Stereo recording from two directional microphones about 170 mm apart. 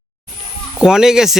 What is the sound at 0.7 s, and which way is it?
Speech, 5° right (ahead or behind).